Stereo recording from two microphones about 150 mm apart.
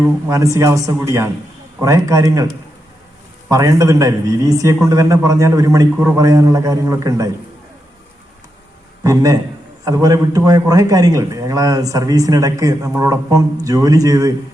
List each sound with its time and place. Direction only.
0.3 s a man's voice: 20° right (ahead or behind)
3.5 s a man's voice: 20° right (ahead or behind)
9.0 s a man's voice: 25° right (ahead or behind)